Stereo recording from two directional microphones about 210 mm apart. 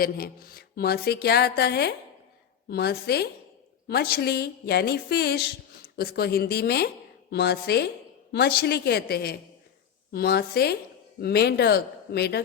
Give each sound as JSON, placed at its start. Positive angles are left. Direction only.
{"t": 0.0, "sound": "a woman's voice", "side_deg": 45}